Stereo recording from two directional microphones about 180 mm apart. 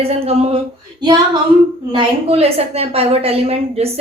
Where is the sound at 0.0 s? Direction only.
35° right (ahead or behind).